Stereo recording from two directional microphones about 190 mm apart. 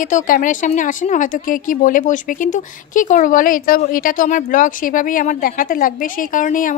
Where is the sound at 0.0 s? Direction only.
45° left (ahead or behind).